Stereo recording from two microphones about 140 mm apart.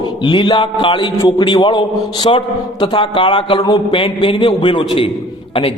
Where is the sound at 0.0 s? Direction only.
35° left (ahead or behind).